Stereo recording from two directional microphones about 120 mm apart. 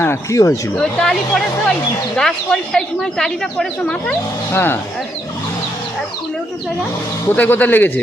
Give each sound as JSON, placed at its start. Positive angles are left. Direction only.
{"t": 0.0, "sound": "speech", "side_deg": 25}
{"t": 0.8, "sound": "a woman's voice", "side_deg": 5}
{"t": 4.5, "sound": "speech", "side_deg": 20}
{"t": 7.3, "sound": "a man's voice", "side_deg": 15}